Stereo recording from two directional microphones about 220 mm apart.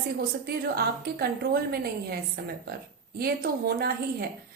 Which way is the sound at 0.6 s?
45° right (ahead or behind).